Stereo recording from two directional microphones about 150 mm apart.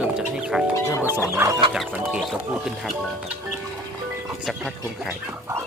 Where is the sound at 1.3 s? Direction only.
20° right (ahead or behind).